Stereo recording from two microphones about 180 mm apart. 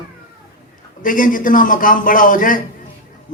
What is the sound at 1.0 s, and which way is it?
A man's voice, 50° left (ahead or behind).